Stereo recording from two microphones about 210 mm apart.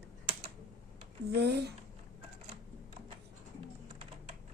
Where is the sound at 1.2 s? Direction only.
50° right (ahead or behind).